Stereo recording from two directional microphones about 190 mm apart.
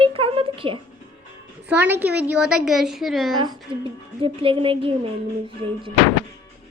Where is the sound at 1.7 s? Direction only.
10° right (ahead or behind).